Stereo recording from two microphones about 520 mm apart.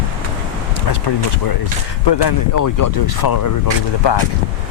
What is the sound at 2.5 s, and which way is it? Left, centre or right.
Speech, left.